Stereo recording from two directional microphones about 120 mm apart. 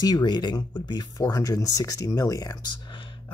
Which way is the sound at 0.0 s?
35° left (ahead or behind).